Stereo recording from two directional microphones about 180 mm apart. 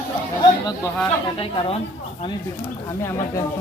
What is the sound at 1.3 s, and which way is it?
Speech, 35° left (ahead or behind).